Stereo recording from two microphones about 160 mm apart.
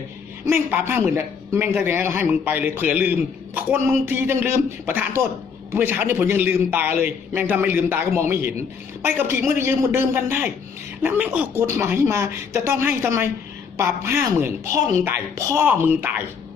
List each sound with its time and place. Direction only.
0.4 s a man's voice: 15° right (ahead or behind)